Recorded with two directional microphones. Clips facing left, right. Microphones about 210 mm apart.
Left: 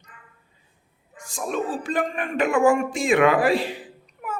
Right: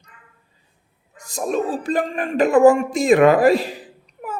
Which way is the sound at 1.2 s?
40° right (ahead or behind).